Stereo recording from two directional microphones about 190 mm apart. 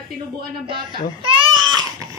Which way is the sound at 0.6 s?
25° right (ahead or behind).